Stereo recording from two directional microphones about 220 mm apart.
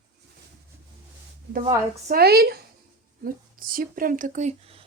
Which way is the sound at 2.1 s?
45° right (ahead or behind).